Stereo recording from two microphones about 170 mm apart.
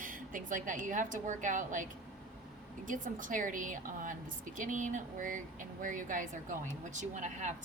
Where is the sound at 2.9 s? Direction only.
50° right (ahead or behind).